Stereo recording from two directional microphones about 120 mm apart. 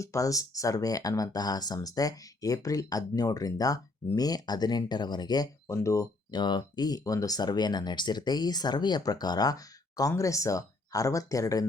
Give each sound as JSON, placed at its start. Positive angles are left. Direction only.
{"t": 0.0, "sound": "speech", "side_deg": 25}